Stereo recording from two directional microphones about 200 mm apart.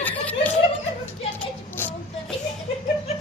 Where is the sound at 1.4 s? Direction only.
10° left (ahead or behind).